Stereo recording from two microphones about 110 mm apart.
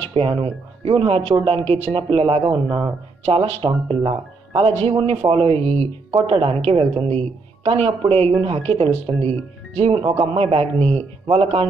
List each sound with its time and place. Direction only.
0.1 s speech: 55° right (ahead or behind)
3.3 s speech: 65° right (ahead or behind)
9.8 s speech: 55° right (ahead or behind)
10.8 s speech: 15° left (ahead or behind)
11.2 s speech: 60° right (ahead or behind)